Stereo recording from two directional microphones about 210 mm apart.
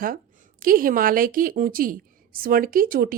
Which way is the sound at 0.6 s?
40° right (ahead or behind).